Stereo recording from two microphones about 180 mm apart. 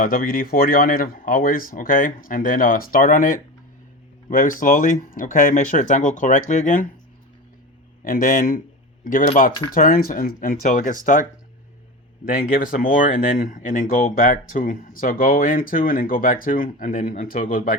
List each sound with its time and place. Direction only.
0.0 s speech: 50° left (ahead or behind)
8.0 s speech: 50° left (ahead or behind)